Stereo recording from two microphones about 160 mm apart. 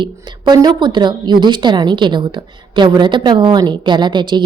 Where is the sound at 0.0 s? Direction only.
30° right (ahead or behind).